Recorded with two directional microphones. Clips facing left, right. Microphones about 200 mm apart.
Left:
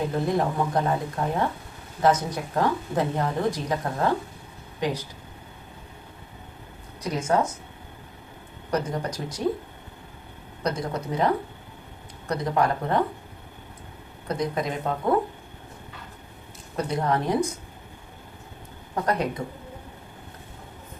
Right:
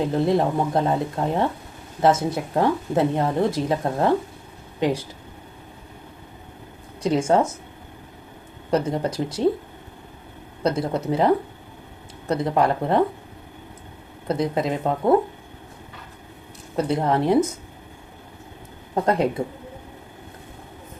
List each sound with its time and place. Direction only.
0.3 s speech: 25° right (ahead or behind)
7.0 s speech: 30° right (ahead or behind)
8.7 s speech: 25° right (ahead or behind)
10.6 s speech: 25° right (ahead or behind)
14.3 s speech: 25° right (ahead or behind)
16.7 s speech: 25° right (ahead or behind)
18.9 s speech: 25° right (ahead or behind)